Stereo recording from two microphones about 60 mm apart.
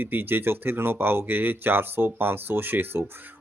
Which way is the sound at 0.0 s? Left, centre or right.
Right.